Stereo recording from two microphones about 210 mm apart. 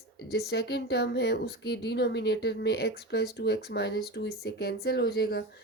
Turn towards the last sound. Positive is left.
turn(degrees=50)  # may be behind; listen again after turning